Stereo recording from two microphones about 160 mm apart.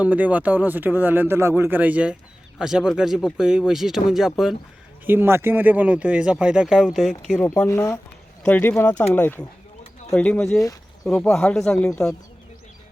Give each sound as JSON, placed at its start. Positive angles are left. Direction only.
{"t": 0.0, "sound": "speech", "side_deg": -10}
{"t": 5.0, "sound": "speech", "side_deg": -15}
{"t": 7.4, "sound": "speech", "side_deg": 15}